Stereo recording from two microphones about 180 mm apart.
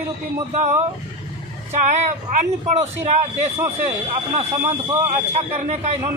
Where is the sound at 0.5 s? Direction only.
40° right (ahead or behind).